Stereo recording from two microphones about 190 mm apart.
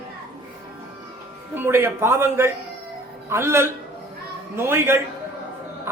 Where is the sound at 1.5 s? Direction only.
10° right (ahead or behind).